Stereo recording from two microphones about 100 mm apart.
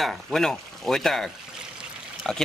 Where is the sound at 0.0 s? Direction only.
Centre (ahead or behind).